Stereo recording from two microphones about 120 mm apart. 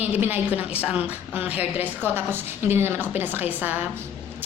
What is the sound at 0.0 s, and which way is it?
A woman's voice, 15° right (ahead or behind).